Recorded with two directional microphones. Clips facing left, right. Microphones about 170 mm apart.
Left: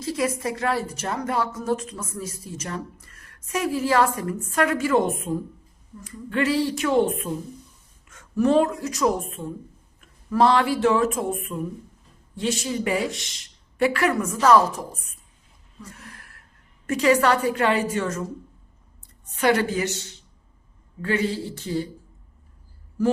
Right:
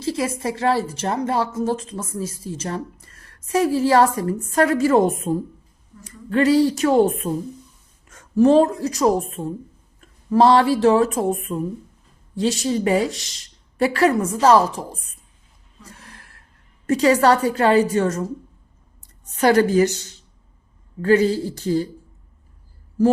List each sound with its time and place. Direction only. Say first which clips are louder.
0.0 s a woman's voice: right 2 dB; 30° right (ahead or behind)
16.0 s a sound: left 1 dB; 30° right (ahead or behind)
16.8 s a woman's voice: right 4 dB; 35° right (ahead or behind)
19.4 s a woman's voice: right 6 dB; 40° right (ahead or behind)
21.0 s a woman's voice: right 8 dB; 35° right (ahead or behind)